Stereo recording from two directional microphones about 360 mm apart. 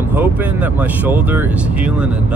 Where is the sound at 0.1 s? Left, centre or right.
Centre.